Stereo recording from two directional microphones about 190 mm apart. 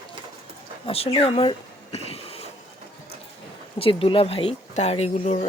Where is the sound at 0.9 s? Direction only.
30° left (ahead or behind).